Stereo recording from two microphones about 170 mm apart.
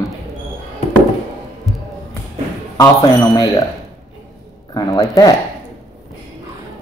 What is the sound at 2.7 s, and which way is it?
Speech, 20° left (ahead or behind).